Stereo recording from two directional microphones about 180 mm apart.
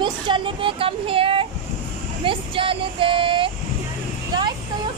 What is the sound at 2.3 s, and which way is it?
Female singing, 30° right (ahead or behind).